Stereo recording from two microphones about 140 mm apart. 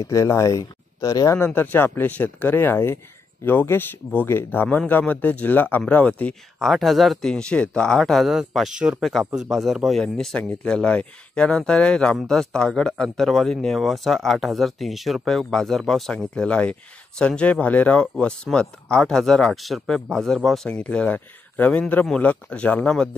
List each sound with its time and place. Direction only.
0.0 s speech: 20° left (ahead or behind)